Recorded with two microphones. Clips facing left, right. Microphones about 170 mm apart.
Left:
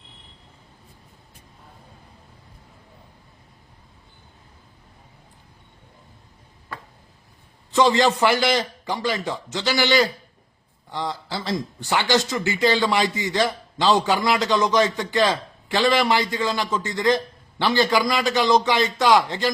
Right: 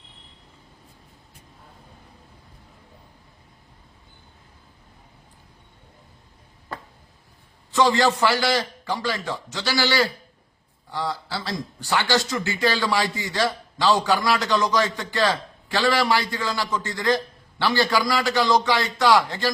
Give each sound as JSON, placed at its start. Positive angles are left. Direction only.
{"t": 7.7, "sound": "speech", "side_deg": 20}